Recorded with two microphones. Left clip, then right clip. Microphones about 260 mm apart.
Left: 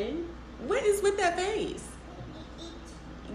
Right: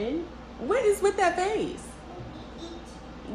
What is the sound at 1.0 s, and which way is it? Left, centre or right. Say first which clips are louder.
Speech: right 3 dB; right.